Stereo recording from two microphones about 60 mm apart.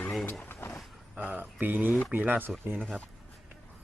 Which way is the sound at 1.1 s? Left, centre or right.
Right.